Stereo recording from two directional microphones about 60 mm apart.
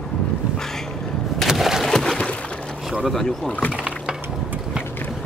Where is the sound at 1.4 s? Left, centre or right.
Centre.